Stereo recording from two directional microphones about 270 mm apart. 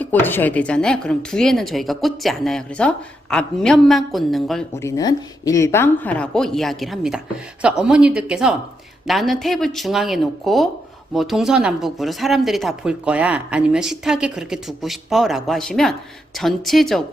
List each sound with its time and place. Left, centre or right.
0.0 s speech: centre
4.9 s speech: centre